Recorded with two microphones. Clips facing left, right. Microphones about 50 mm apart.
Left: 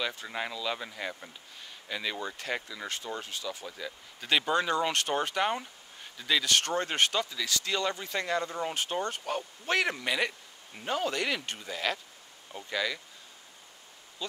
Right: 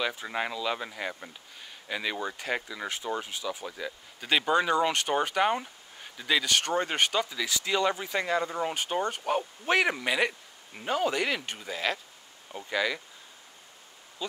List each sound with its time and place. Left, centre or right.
0.0 s speech: centre